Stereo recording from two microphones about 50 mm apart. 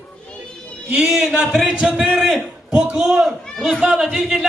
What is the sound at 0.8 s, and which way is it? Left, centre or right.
Speech, right.